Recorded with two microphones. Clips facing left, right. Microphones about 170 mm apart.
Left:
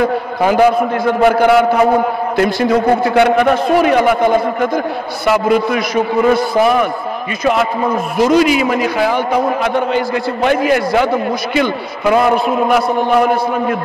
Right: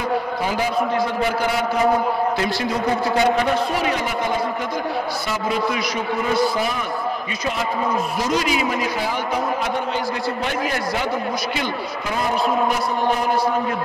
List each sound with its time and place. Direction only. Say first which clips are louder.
0.0 s a man's voice: left 8 dB; 60° left (ahead or behind)
8.2 s a man's voice: left 13 dB; 65° left (ahead or behind)